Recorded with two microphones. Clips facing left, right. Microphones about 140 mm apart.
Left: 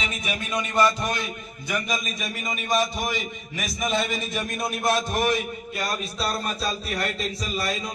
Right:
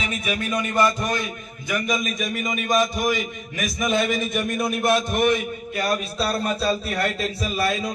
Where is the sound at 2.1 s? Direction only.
50° right (ahead or behind).